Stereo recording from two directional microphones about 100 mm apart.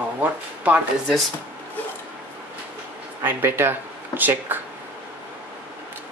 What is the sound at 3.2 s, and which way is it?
Speech, 25° right (ahead or behind).